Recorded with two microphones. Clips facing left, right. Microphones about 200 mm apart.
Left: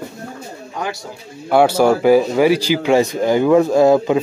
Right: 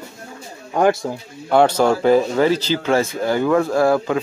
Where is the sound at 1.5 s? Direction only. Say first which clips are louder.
Left 2 dB; 10° left (ahead or behind).